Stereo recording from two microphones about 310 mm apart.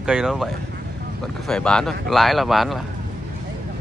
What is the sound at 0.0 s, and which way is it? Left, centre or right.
Speech, centre.